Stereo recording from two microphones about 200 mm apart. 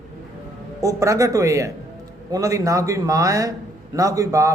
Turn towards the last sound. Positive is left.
turn(degrees=-15)  # may be behind; listen again after turning